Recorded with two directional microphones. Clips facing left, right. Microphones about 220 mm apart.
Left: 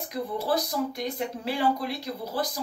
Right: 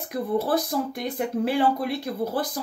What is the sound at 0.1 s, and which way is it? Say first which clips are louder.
Speech: right 4 dB; 55° right (ahead or behind).